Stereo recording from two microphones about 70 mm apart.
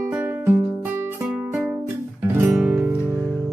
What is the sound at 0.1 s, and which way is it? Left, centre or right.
Music, right.